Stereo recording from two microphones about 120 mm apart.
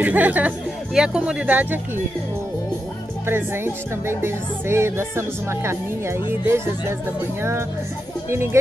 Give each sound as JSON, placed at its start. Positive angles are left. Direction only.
{"t": 0.0, "sound": "speech", "side_deg": -15}
{"t": 3.3, "sound": "speech", "side_deg": -20}